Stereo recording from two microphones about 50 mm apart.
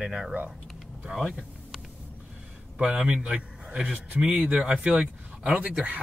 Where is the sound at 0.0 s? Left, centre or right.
Centre.